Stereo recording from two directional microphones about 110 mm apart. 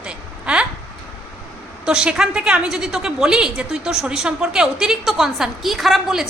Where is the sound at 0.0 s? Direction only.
10° right (ahead or behind).